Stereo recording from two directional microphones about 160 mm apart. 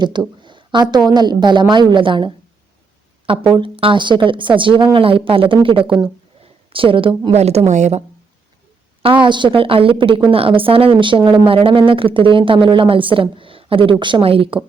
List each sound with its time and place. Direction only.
0.0 s a woman's voice: 30° right (ahead or behind); by 8.0 s 45° right (ahead or behind)
9.0 s speech: 30° right (ahead or behind)